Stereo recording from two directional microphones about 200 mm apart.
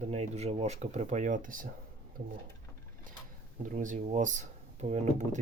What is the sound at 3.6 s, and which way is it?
Speech, 40° right (ahead or behind).